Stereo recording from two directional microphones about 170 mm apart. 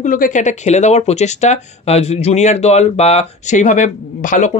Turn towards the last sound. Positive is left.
turn(degrees=50)  # may be behind; listen again after turning